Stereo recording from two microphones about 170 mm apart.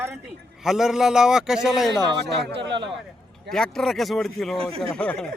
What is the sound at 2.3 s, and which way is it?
Speech, 85° right.